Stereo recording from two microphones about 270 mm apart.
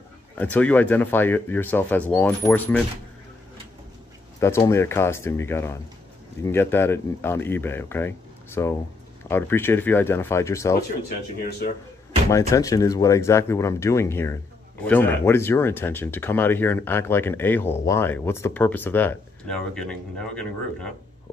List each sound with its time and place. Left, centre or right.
0.4 s speech: centre
4.4 s speech: centre
12.3 s speech: centre